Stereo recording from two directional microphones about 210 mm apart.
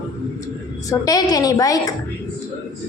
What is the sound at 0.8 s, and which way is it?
A woman's voice, 15° left (ahead or behind).